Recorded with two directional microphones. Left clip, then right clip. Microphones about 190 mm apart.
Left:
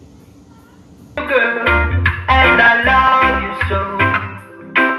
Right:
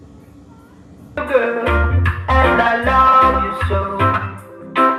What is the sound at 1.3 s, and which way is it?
Music, 20° right (ahead or behind).